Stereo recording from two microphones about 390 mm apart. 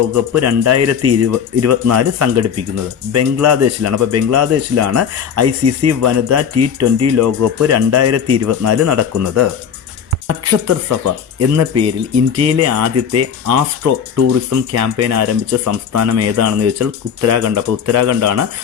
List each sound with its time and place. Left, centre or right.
0.1 s speech: right